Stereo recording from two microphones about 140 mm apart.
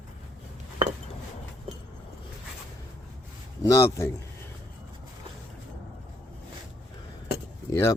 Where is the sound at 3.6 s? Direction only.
20° left (ahead or behind).